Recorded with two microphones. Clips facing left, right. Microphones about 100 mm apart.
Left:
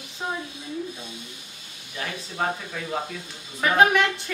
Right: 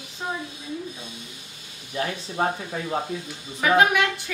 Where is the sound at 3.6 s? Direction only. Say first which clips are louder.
Even; centre (ahead or behind).